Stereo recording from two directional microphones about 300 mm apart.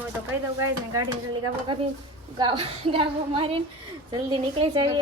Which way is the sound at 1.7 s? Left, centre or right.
Centre.